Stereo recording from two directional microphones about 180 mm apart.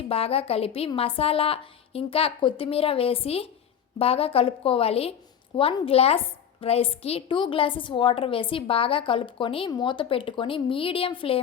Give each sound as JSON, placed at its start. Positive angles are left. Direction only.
{"t": 0.1, "sound": "a woman's voice", "side_deg": 30}